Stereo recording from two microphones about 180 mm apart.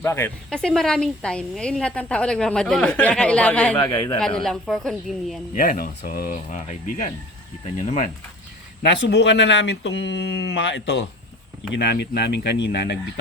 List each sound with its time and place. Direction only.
0.0 s speech: 15° left (ahead or behind)
3.8 s a man's voice: 20° left (ahead or behind)
4.4 s speech: 5° left (ahead or behind)
5.5 s speech: 50° left (ahead or behind)
8.8 s speech: 70° left (ahead or behind)